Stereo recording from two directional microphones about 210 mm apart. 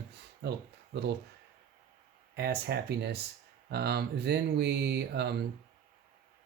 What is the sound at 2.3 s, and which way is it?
Speech, 50° right (ahead or behind).